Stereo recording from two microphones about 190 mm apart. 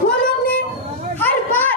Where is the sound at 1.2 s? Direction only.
10° left (ahead or behind).